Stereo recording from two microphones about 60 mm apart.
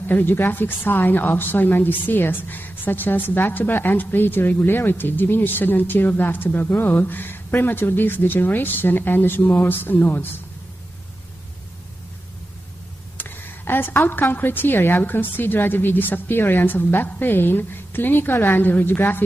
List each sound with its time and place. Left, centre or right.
0.0 s a woman's voice: left
13.2 s a woman's voice: left